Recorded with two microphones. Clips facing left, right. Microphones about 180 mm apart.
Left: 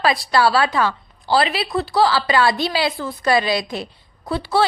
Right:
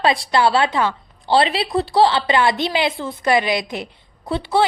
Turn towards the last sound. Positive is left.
turn(degrees=-20)  # may be behind; listen again after turning